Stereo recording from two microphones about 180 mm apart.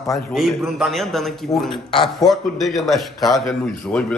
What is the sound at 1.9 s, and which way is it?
Speech, 25° left (ahead or behind).